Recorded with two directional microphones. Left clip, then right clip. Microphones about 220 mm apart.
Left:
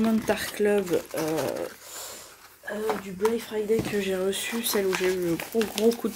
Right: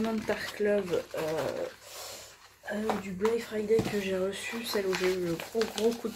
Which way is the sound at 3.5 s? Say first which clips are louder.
Left 2 dB; 35° left (ahead or behind).